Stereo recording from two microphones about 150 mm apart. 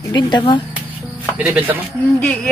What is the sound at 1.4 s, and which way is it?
Speech, 10° right (ahead or behind).